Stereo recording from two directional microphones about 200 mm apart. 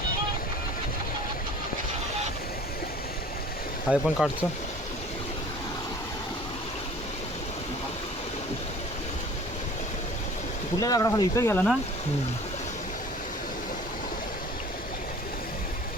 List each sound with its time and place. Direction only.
3.8 s speech: centre (ahead or behind)
10.8 s speech: 15° left (ahead or behind)